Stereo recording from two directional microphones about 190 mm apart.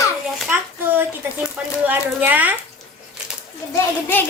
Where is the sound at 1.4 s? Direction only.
10° right (ahead or behind).